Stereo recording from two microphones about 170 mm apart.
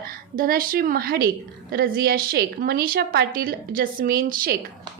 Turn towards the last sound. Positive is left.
turn(degrees=-60)  # may be behind; listen again after turning